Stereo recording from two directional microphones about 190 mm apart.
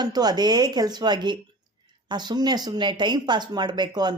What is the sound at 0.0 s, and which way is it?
Speech, 20° right (ahead or behind).